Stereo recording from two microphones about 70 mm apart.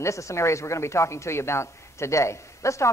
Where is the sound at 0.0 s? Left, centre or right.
Left.